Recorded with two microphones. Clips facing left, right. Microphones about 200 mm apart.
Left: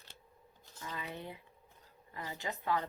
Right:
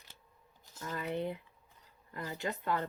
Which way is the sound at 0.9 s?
55° right (ahead or behind).